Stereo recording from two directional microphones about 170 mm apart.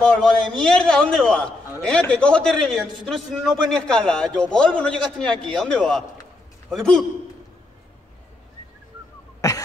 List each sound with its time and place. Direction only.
0.0 s a man's voice: 5° left (ahead or behind)
9.4 s cough: 20° left (ahead or behind)